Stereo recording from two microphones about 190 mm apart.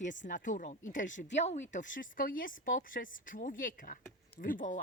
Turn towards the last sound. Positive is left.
turn(degrees=45)  # may be behind; listen again after turning